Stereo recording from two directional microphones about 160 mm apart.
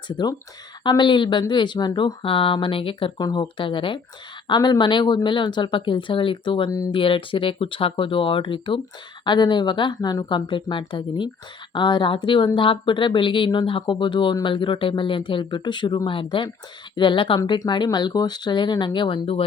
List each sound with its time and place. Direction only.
0.1 s speech: 25° left (ahead or behind)
7.0 s speech: 35° left (ahead or behind)